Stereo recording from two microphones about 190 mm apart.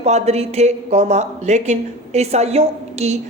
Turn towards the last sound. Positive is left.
turn(degrees=-35)  # may be behind; listen again after turning